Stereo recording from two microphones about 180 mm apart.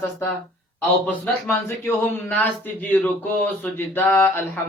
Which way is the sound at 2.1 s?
10° left (ahead or behind).